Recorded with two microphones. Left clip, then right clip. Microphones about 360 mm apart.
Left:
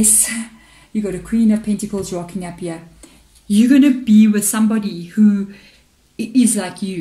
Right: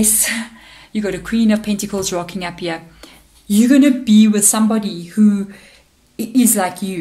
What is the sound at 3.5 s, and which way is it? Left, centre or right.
Speech, centre.